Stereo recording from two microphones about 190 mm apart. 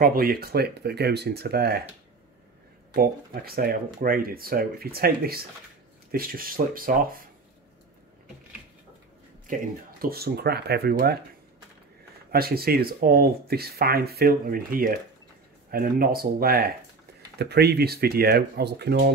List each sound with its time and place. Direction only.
0.0 s speech: 50° right (ahead or behind)
2.9 s speech: 50° right (ahead or behind)
9.5 s speech: 50° right (ahead or behind)
12.3 s speech: 55° right (ahead or behind)